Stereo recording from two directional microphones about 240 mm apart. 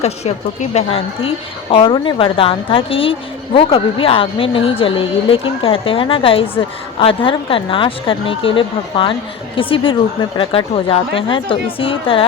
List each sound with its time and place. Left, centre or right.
0.0 s a woman's voice: left